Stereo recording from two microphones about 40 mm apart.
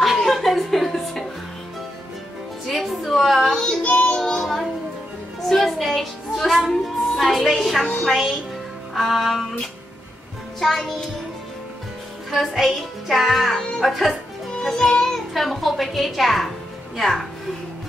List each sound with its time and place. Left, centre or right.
0.2 s music: centre
2.7 s a sound: centre
3.8 s child singing: left
4.2 s child singing: centre
8.0 s music: centre
10.6 s music: centre
12.3 s a woman's voice: centre
14.6 s music: centre
15.3 s a woman's voice: centre